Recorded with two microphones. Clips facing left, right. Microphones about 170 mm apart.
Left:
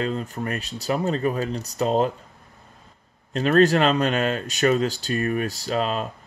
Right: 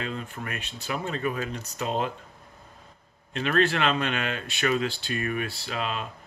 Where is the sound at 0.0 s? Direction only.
40° left (ahead or behind).